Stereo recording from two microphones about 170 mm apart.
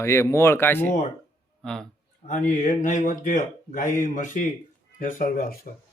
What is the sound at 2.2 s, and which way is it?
Speech, 45° left (ahead or behind).